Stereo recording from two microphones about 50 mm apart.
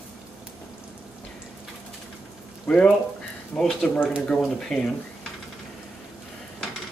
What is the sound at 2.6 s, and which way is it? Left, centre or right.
Speech, centre.